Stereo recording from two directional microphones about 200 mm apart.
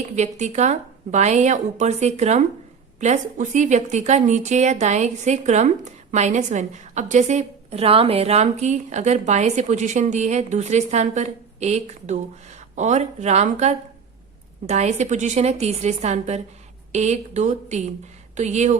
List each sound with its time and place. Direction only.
0.2 s a woman's voice: 35° right (ahead or behind)